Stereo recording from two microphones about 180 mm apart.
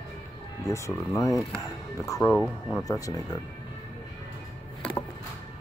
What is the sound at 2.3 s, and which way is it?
Speech, centre (ahead or behind).